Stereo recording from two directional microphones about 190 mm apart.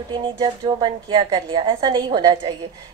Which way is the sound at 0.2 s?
25° right (ahead or behind).